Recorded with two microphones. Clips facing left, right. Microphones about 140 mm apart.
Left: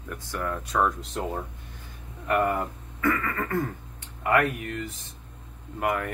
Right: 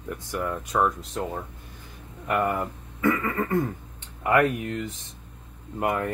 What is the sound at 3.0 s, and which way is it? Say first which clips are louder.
Speech: right 2 dB; 15° right (ahead or behind).